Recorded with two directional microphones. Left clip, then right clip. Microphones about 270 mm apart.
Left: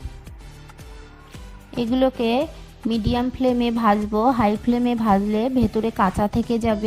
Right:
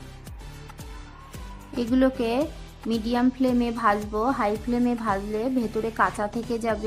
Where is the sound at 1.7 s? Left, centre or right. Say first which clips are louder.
Left 3 dB; left.